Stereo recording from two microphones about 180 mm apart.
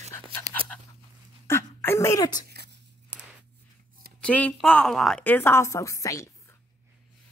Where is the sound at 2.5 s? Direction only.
70° right (ahead or behind).